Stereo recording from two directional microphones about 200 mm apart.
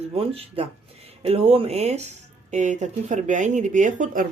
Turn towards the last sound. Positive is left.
turn(degrees=-40)  # may be behind; listen again after turning